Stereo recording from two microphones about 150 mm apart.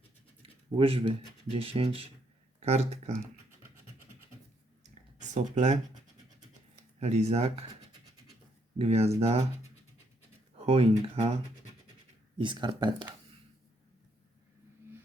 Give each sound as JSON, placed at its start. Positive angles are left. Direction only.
{"t": 0.8, "sound": "speech", "side_deg": -40}
{"t": 4.8, "sound": "a sound", "side_deg": -50}
{"t": 7.0, "sound": "speech", "side_deg": -45}
{"t": 8.8, "sound": "speech", "side_deg": -45}
{"t": 10.6, "sound": "speech", "side_deg": -45}
{"t": 12.4, "sound": "speech", "side_deg": -30}